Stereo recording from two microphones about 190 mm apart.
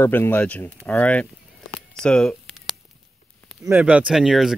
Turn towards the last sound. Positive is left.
turn(degrees=0)  # may be behind; listen again after turning